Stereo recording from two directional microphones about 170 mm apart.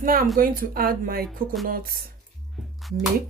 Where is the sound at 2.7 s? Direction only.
Centre (ahead or behind).